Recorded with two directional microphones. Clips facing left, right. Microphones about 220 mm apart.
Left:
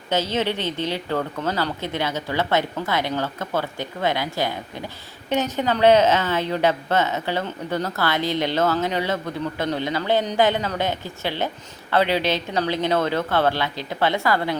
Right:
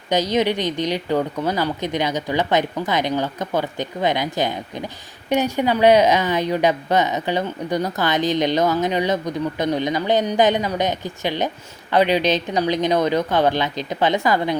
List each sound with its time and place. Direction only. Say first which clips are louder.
0.1 s a woman's voice: right 4 dB; 15° right (ahead or behind)